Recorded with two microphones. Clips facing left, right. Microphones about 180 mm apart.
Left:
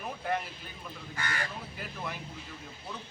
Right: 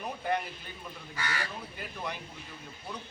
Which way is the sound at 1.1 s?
50° left (ahead or behind).